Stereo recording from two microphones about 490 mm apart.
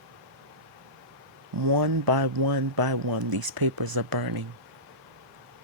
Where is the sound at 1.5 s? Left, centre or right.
Right.